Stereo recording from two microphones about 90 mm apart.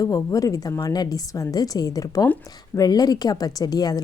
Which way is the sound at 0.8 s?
50° left (ahead or behind).